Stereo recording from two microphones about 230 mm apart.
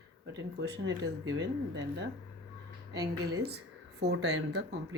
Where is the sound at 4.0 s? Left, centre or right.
Right.